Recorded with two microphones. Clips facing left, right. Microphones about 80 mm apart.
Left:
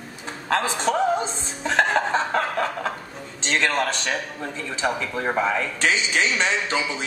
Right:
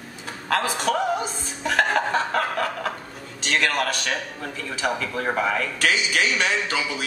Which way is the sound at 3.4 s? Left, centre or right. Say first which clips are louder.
Left 1 dB; left.